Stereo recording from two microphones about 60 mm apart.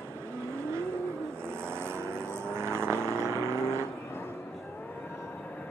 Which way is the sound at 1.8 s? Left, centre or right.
Right.